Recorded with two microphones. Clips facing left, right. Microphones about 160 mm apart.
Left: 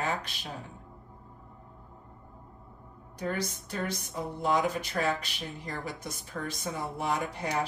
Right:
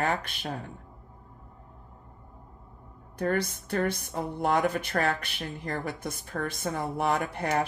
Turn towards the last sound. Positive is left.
turn(degrees=-55)  # may be behind; listen again after turning